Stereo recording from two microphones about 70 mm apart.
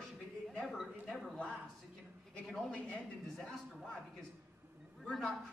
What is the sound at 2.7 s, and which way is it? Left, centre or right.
Speech, centre.